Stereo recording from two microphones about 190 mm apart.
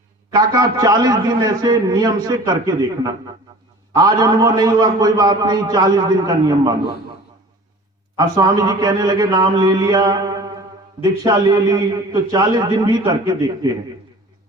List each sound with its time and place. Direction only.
0.3 s a man's voice: 20° right (ahead or behind)
8.4 s a man's voice: 20° right (ahead or behind)